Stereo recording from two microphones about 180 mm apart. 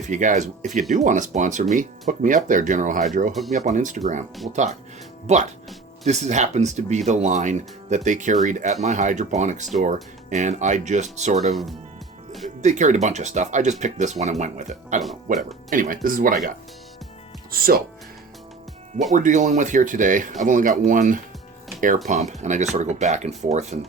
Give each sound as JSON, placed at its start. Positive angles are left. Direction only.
{"t": 0.1, "sound": "speech", "side_deg": -45}
{"t": 12.6, "sound": "speech", "side_deg": -40}
{"t": 17.5, "sound": "speech", "side_deg": -55}
{"t": 19.1, "sound": "speech", "side_deg": -45}